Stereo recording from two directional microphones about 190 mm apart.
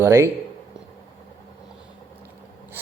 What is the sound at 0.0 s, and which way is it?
Speech, 15° right (ahead or behind).